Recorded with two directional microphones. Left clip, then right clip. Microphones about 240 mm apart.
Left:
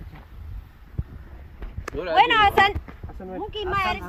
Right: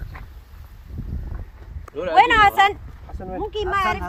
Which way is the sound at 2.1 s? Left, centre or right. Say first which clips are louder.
Right 3 dB; right.